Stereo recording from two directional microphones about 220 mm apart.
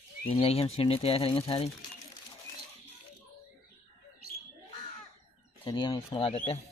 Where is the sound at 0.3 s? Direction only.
25° left (ahead or behind).